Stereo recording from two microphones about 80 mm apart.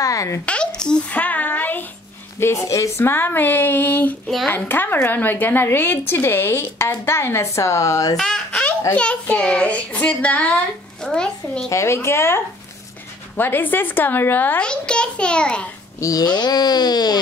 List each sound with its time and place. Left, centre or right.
0.0 s a sound: left
0.5 s speech: centre
1.2 s a sound: left
2.4 s speech: left
3.0 s a woman's voice: left
8.9 s a child's voice: centre
11.7 s a woman's voice: left
14.6 s a child's voice: centre
16.0 s speech: left